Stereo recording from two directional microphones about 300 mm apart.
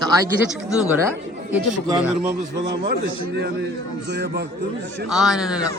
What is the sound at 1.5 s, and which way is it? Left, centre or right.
Speech, centre.